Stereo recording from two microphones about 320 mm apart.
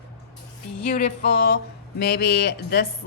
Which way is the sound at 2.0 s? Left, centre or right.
Left.